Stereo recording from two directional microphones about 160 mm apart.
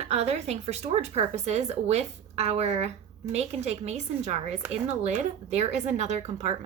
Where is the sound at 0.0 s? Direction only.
40° right (ahead or behind).